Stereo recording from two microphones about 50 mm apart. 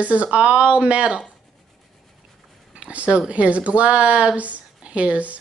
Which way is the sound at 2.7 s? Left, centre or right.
Right.